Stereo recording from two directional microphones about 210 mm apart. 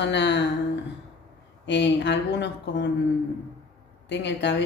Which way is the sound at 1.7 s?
55° left (ahead or behind).